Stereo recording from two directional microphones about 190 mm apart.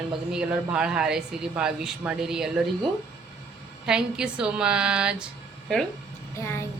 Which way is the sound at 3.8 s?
5° right (ahead or behind).